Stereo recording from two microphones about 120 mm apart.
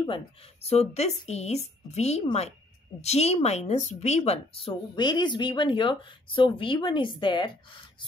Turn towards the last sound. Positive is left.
turn(degrees=40)  # may be behind; listen again after turning